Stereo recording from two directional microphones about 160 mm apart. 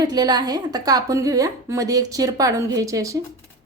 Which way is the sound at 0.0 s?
25° right (ahead or behind).